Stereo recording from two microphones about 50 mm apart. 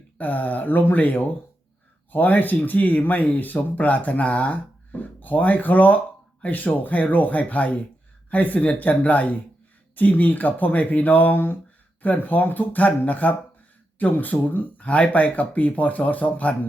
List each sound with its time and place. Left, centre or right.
0.2 s speech: left